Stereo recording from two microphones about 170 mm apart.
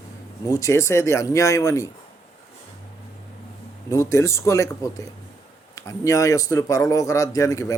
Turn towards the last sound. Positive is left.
turn(degrees=20)  # may be behind; listen again after turning